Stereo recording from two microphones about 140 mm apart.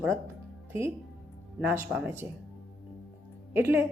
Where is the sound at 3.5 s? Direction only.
15° right (ahead or behind).